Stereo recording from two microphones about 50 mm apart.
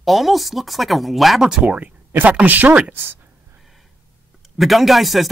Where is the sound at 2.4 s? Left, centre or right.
Right.